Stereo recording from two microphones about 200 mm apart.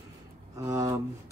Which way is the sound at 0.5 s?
15° right (ahead or behind).